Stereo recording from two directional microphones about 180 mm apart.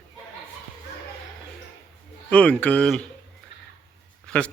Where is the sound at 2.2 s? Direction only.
5° left (ahead or behind).